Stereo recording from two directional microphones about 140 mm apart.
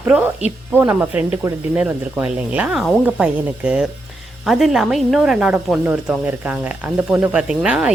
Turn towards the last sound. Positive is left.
turn(degrees=-5)  # may be behind; listen again after turning